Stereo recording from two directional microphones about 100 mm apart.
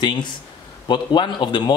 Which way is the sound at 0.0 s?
50° left (ahead or behind).